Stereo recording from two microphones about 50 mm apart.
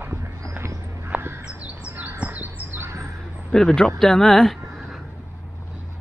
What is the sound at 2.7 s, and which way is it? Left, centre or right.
Bird, right.